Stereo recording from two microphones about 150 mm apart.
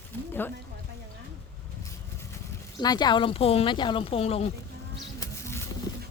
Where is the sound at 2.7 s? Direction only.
30° left (ahead or behind).